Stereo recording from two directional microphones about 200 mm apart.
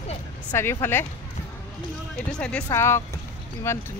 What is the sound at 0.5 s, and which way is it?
Speech, 10° left (ahead or behind).